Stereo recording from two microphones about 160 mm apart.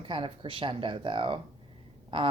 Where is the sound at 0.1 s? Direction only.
35° right (ahead or behind).